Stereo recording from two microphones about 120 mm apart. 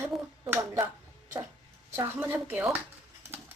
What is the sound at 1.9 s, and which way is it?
Speech, 20° right (ahead or behind).